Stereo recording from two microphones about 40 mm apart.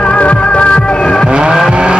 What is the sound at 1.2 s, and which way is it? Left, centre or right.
Vehicle, right.